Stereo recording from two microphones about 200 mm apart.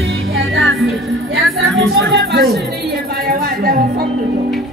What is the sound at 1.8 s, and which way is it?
Music, 65° right (ahead or behind).